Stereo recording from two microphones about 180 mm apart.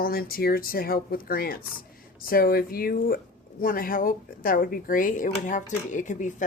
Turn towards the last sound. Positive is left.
turn(degrees=45)  # may be behind; listen again after turning